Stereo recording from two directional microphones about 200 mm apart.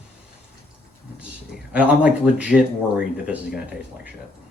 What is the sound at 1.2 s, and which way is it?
Speech, 5° right (ahead or behind).